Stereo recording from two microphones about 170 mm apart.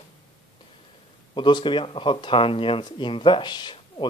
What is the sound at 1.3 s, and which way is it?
Speech, 25° left (ahead or behind).